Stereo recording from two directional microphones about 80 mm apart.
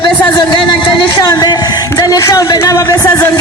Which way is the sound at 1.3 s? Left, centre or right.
Left.